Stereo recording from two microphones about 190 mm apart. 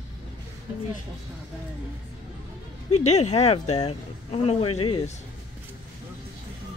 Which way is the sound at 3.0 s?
35° left (ahead or behind).